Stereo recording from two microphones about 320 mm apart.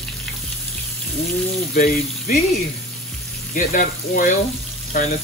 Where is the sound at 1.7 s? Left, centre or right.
Left.